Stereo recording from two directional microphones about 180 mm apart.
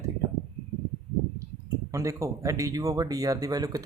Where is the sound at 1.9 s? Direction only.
15° right (ahead or behind).